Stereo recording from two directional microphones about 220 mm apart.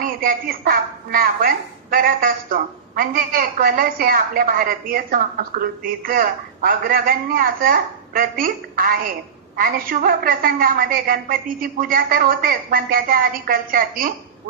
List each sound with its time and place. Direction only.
0.0 s a woman's voice: 40° right (ahead or behind)